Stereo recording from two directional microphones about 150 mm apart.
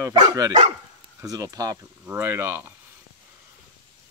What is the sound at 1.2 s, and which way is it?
Speech, 25° right (ahead or behind).